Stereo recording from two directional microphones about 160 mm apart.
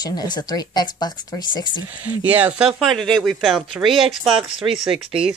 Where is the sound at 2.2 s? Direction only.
10° right (ahead or behind).